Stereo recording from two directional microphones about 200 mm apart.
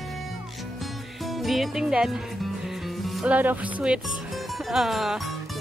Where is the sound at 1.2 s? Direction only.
Centre (ahead or behind).